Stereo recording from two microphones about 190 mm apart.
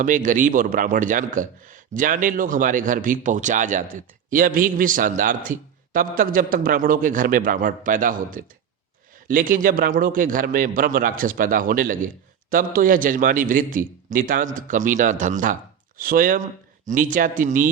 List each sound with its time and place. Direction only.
0.0 s a man's voice: 45° right (ahead or behind)